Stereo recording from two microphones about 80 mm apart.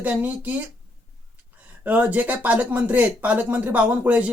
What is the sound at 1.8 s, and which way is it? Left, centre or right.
Speech, right.